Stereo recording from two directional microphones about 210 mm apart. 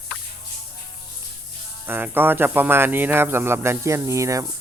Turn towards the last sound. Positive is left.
turn(degrees=-15)  # may be behind; listen again after turning